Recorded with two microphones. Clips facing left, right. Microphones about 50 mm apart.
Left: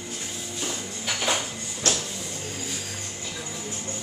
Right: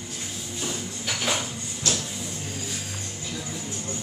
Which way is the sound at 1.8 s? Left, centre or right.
Left.